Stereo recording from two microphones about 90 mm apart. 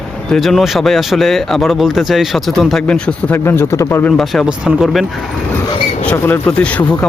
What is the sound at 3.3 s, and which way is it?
Speech, 25° left (ahead or behind).